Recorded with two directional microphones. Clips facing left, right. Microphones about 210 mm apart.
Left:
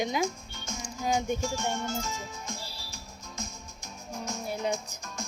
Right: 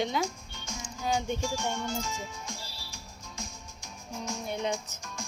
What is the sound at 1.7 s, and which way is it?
Music, 45° left (ahead or behind).